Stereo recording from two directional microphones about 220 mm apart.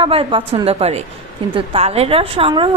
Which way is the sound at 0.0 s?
25° right (ahead or behind).